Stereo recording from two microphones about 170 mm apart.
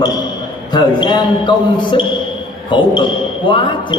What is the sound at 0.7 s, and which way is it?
A man's voice, 25° left (ahead or behind).